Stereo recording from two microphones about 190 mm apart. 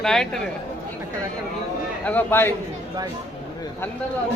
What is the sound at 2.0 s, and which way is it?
Speech, 10° left (ahead or behind).